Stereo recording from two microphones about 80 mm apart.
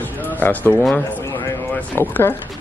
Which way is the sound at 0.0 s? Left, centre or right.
Left.